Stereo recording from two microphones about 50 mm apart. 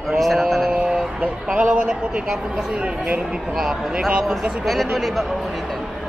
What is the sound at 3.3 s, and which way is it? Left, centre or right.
Speech, centre.